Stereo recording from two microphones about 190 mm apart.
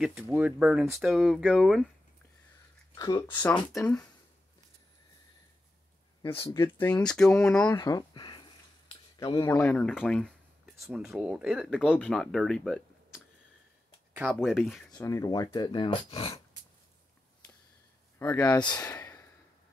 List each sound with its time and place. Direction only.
0.0 s speech: 5° right (ahead or behind)
2.9 s speech: 20° left (ahead or behind)
3.4 s speech: 5° left (ahead or behind)
6.3 s speech: 15° left (ahead or behind)
7.7 s speech: 20° left (ahead or behind)
9.6 s speech: 10° left (ahead or behind)
14.3 s speech: centre (ahead or behind)
15.0 s speech: 15° left (ahead or behind)
18.2 s speech: 10° left (ahead or behind)
18.8 s sigh: 10° left (ahead or behind)